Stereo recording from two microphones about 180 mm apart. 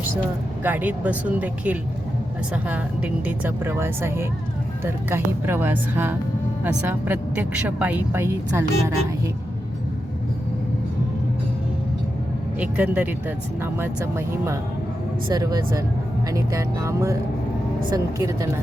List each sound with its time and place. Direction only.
0.6 s speech: 10° right (ahead or behind)
12.5 s speech: 10° right (ahead or behind)